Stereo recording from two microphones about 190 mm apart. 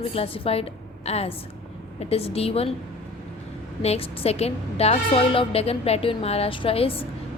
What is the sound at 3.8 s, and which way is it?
A woman's voice, 30° left (ahead or behind).